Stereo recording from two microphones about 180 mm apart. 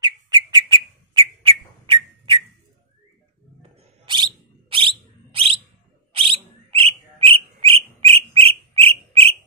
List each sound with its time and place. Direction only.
0.0 s bird: 25° right (ahead or behind)
4.0 s bird: 25° right (ahead or behind)